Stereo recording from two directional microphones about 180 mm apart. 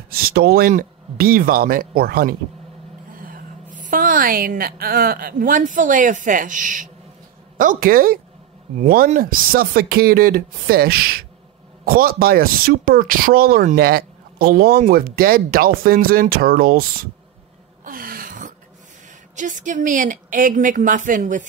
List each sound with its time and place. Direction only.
0.1 s a woman's voice: 60° right (ahead or behind)
17.8 s a sound: 50° right (ahead or behind)
19.3 s a woman's voice: 45° right (ahead or behind)